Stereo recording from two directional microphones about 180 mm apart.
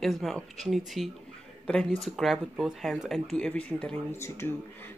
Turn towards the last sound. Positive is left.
turn(degrees=15)  # may be behind; listen again after turning